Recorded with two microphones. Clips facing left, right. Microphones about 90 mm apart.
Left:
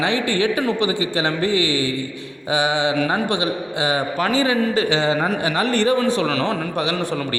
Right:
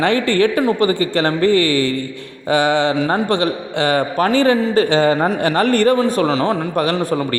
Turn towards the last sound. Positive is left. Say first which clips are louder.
# right 5 dB
turn(degrees=-45)  # may be behind; listen again after turning